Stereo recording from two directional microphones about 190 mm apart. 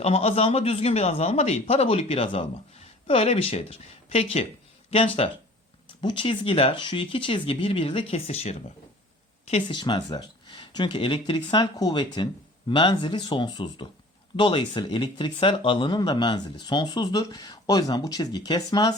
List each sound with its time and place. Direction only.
0.0 s speech: 35° left (ahead or behind)
9.6 s speech: 25° left (ahead or behind)